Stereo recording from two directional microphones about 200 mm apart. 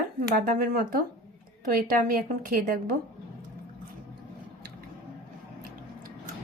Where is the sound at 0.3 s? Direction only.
45° right (ahead or behind).